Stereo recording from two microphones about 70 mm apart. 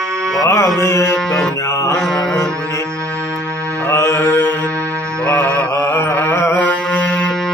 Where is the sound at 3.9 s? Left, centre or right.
Left.